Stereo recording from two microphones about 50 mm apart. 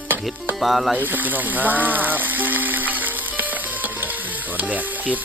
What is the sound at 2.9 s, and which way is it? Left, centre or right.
Stir, right.